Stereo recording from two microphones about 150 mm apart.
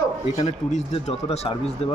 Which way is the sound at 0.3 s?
45° left (ahead or behind).